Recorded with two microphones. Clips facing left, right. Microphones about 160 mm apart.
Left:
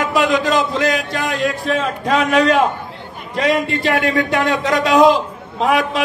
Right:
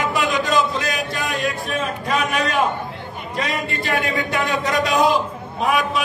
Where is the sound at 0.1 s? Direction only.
90° left.